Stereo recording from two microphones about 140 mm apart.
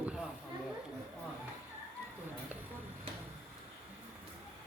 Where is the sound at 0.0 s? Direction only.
5° right (ahead or behind).